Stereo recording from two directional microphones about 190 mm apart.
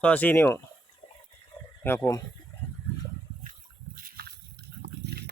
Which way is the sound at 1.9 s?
20° left (ahead or behind).